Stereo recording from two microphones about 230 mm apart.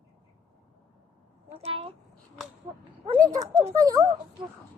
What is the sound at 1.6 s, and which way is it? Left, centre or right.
Speech, right.